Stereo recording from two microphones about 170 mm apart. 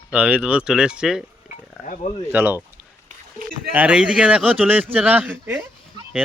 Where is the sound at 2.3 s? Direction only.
10° right (ahead or behind).